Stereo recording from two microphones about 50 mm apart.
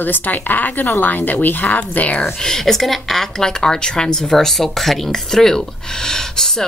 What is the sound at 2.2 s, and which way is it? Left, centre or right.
Speech, centre.